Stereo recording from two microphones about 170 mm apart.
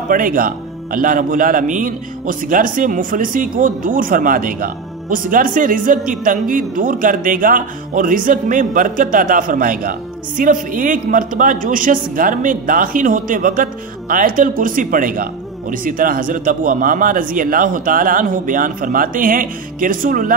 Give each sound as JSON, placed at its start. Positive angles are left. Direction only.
{"t": 0.1, "sound": "speech", "side_deg": -55}